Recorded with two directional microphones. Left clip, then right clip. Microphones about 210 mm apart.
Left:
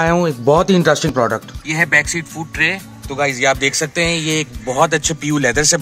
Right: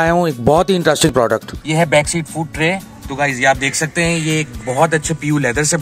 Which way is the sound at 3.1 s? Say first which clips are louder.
Right 1 dB; 50° left (ahead or behind).